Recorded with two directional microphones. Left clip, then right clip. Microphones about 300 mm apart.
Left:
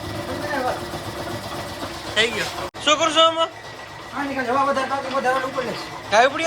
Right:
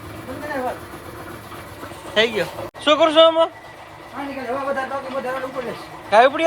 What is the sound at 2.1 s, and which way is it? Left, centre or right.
Speech, centre.